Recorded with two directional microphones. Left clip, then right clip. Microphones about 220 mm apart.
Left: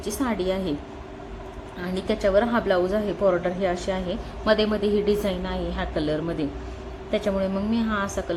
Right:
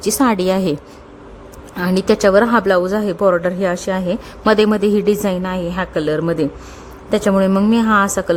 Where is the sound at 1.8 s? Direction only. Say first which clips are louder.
Right 11 dB; 50° right (ahead or behind).